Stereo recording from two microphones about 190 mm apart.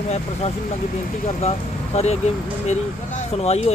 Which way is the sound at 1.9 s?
35° left (ahead or behind).